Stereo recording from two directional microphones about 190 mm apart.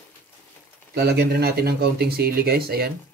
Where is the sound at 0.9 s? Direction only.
55° right (ahead or behind).